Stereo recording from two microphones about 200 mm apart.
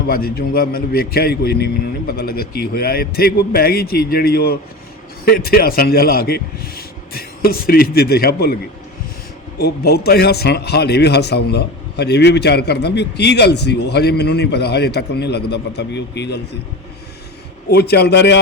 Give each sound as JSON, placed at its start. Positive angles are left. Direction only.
{"t": 0.1, "sound": "a man's voice", "side_deg": 50}
{"t": 9.6, "sound": "a man's voice", "side_deg": 55}
{"t": 17.7, "sound": "a man's voice", "side_deg": 55}